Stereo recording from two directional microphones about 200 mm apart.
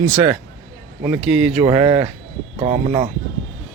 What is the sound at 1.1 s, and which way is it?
Speech, 5° right (ahead or behind).